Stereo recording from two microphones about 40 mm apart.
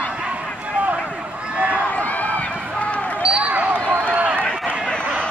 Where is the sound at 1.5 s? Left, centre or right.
Right.